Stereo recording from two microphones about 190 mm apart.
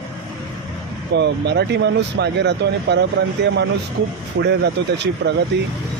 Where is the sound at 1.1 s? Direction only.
65° right (ahead or behind).